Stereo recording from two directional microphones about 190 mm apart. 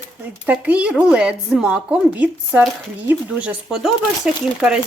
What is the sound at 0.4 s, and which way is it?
Speech, 5° right (ahead or behind).